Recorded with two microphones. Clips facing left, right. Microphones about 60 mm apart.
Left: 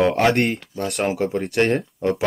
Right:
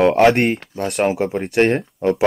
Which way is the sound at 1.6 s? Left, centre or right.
Right.